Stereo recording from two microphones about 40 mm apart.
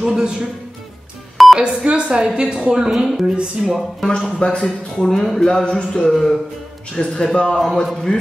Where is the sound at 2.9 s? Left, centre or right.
Centre.